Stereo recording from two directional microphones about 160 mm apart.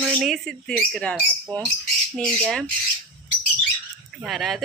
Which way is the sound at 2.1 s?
5° left (ahead or behind).